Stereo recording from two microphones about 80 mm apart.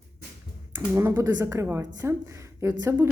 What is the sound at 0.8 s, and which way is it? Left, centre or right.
A woman's voice, right.